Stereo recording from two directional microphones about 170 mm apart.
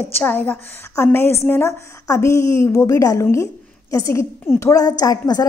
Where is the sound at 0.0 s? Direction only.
10° left (ahead or behind).